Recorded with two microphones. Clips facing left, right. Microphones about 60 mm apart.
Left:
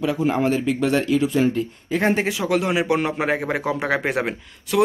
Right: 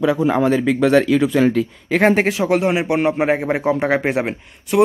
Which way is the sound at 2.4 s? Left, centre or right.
Right.